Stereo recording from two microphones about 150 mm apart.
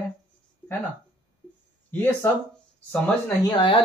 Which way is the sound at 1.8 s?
15° left (ahead or behind).